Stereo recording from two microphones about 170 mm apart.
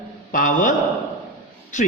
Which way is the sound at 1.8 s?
45° left (ahead or behind).